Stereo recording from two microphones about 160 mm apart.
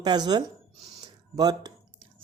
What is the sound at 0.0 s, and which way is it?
Speech, 25° right (ahead or behind).